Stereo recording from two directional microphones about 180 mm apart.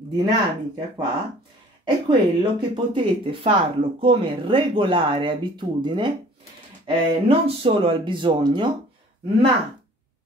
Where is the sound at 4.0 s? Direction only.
30° right (ahead or behind).